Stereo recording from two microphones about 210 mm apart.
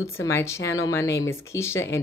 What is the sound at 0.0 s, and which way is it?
Speech, 10° left (ahead or behind).